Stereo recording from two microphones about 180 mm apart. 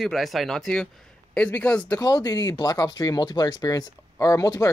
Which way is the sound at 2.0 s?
20° left (ahead or behind).